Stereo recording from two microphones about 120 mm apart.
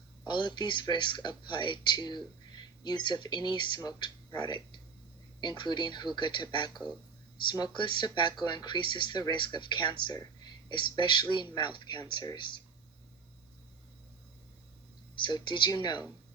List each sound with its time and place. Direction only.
0.3 s speech: 40° left (ahead or behind)
15.2 s speech: 40° left (ahead or behind)